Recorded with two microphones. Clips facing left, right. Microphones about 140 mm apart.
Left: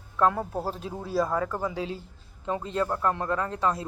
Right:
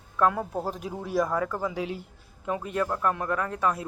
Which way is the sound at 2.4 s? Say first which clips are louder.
Even; 25° left (ahead or behind).